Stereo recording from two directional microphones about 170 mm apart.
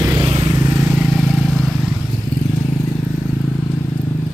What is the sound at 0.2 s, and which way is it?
Vehicle, 30° right (ahead or behind).